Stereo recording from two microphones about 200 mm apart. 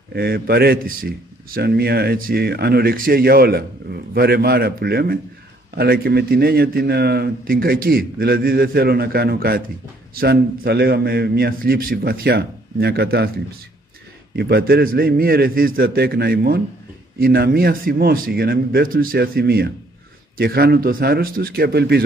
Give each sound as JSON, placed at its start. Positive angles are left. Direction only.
{"t": 0.1, "sound": "a man's voice", "side_deg": -50}
{"t": 14.3, "sound": "a man's voice", "side_deg": -50}